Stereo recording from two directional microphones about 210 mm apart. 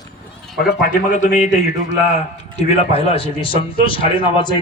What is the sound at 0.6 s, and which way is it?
A man's voice, 40° left (ahead or behind).